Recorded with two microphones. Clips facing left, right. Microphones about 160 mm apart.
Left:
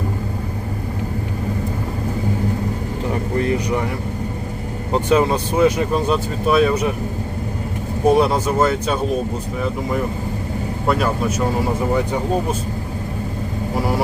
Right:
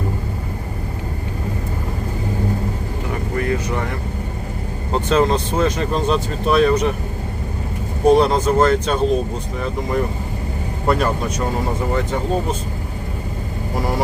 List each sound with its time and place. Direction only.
3.3 s vehicle: 20° left (ahead or behind)
4.9 s speech: 15° left (ahead or behind)
8.0 s speech: 5° left (ahead or behind)
10.8 s speech: centre (ahead or behind)